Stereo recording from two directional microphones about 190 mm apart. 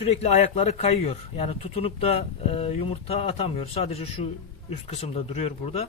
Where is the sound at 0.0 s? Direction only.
35° left (ahead or behind).